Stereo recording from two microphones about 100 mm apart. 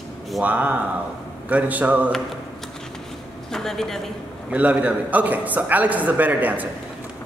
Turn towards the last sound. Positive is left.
turn(degrees=-15)  # may be behind; listen again after turning